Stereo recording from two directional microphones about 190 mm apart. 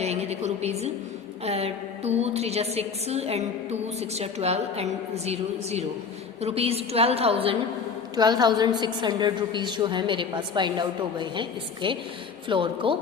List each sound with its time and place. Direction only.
0.0 s a woman's voice: 35° right (ahead or behind)